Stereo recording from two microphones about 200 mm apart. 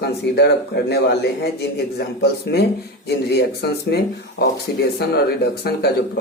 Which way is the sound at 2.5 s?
55° left (ahead or behind).